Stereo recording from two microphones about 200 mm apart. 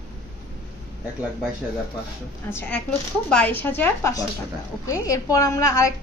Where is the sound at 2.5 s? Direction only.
10° left (ahead or behind).